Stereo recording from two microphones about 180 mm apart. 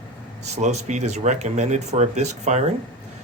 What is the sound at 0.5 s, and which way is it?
Speech, 40° right (ahead or behind).